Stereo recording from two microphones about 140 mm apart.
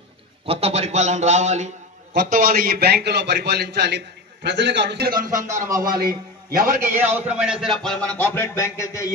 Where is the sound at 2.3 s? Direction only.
85° right.